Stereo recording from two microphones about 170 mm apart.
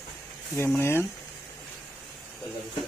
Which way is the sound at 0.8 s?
15° left (ahead or behind).